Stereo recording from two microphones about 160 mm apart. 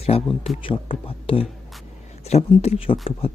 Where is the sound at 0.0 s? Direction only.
40° left (ahead or behind).